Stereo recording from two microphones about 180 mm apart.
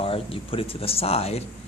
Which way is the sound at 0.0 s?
30° left (ahead or behind).